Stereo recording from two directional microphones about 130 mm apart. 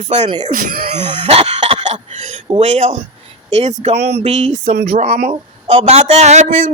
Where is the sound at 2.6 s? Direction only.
60° right (ahead or behind).